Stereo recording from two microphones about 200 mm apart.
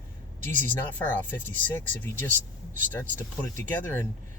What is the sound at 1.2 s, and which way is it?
Speech, 10° left (ahead or behind).